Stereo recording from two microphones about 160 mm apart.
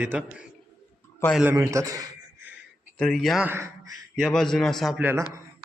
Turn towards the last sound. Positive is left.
turn(degrees=-15)  # may be behind; listen again after turning